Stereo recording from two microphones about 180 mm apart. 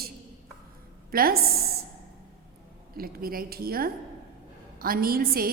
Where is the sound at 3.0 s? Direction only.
55° right (ahead or behind).